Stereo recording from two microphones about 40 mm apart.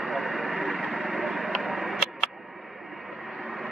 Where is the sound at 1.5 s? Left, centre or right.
Centre.